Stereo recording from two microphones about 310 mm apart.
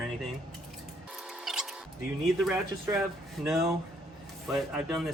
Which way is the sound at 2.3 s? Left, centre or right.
Centre.